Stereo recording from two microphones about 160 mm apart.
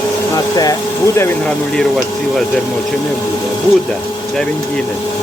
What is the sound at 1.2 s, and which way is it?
Speech, 5° left (ahead or behind).